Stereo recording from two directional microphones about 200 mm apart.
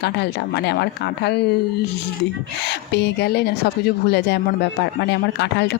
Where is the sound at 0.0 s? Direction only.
55° left (ahead or behind).